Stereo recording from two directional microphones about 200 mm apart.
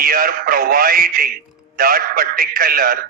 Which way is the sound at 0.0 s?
45° right (ahead or behind).